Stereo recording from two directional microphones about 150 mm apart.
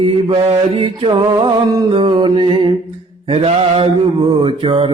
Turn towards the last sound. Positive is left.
turn(degrees=-35)  # may be behind; listen again after turning